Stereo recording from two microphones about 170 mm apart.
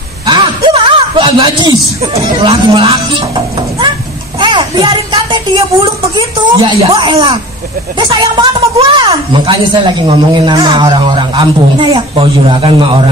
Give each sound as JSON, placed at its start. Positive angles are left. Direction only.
{"t": 0.3, "sound": "a man's voice", "side_deg": -30}
{"t": 4.4, "sound": "a sound", "side_deg": -25}
{"t": 6.1, "sound": "a woman's voice", "side_deg": -25}